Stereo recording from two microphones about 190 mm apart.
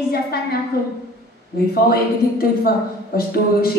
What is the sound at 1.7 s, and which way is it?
A woman's voice, 55° left (ahead or behind).